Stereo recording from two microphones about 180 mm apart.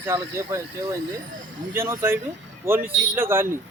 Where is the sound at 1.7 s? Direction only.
15° right (ahead or behind).